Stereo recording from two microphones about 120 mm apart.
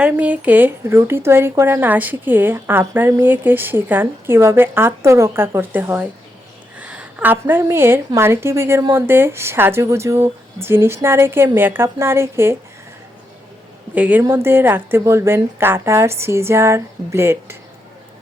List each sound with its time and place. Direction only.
0.0 s a woman's voice: 10° right (ahead or behind)
13.9 s speech: 15° right (ahead or behind)